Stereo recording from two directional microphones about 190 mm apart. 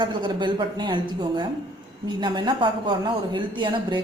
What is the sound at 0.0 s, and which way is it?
Speech, 25° right (ahead or behind).